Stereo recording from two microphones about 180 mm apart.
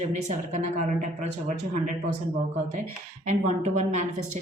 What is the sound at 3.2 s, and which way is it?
Speech, 40° right (ahead or behind).